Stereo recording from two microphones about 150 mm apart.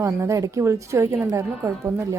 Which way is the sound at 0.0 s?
20° right (ahead or behind).